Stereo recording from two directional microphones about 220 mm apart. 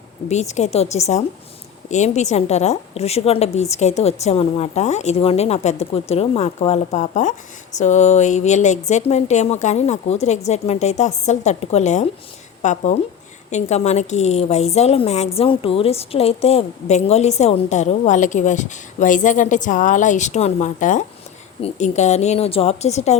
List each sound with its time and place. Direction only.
0.3 s a woman's voice: 30° left (ahead or behind)